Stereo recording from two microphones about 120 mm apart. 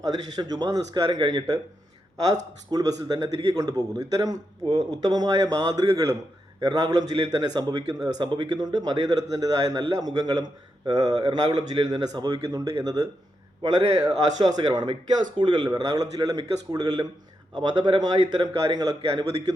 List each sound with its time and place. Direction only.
0.0 s a man's voice: 35° right (ahead or behind)
2.6 s a man's voice: 35° right (ahead or behind)